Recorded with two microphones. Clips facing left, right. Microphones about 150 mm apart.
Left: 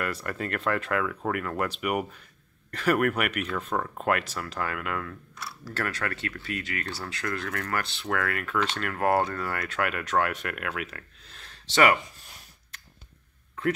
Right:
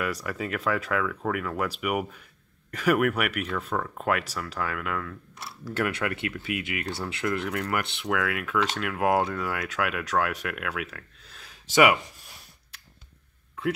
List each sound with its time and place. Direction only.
0.0 s speech: 5° right (ahead or behind)
5.4 s speech: 20° right (ahead or behind)
8.1 s speech: 5° right (ahead or behind)